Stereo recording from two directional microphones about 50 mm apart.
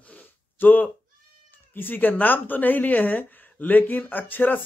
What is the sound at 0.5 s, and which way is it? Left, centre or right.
Speech, left.